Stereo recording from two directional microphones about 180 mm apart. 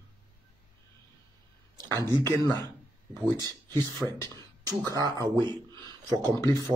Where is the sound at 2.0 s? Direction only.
20° right (ahead or behind).